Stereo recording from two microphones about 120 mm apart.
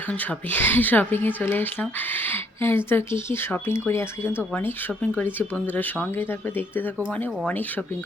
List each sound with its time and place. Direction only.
0.1 s speech: 15° left (ahead or behind)